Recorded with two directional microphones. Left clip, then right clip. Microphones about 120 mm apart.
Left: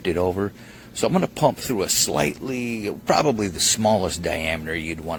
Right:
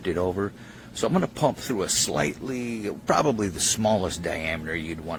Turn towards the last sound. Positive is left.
turn(degrees=30)  # may be behind; listen again after turning